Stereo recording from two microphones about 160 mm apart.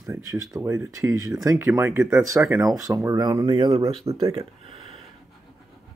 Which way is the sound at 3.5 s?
35° right (ahead or behind).